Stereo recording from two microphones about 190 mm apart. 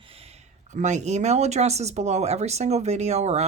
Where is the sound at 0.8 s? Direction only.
40° right (ahead or behind).